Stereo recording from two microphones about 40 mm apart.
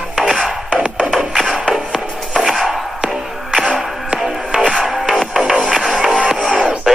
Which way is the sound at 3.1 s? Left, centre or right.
Centre.